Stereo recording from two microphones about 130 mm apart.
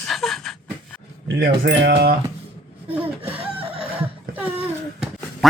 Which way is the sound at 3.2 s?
15° right (ahead or behind).